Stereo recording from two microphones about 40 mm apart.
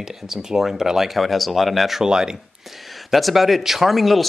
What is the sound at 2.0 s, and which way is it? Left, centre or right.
Speech, centre.